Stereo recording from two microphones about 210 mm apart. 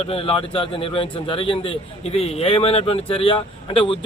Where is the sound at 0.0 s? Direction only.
30° left (ahead or behind).